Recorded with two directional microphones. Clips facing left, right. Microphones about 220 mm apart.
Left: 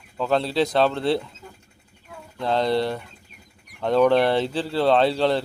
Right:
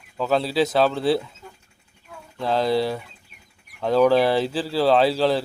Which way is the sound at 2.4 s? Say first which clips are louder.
Right 1 dB; 5° right (ahead or behind).